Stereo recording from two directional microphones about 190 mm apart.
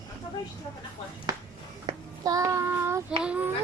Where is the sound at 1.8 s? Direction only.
20° right (ahead or behind).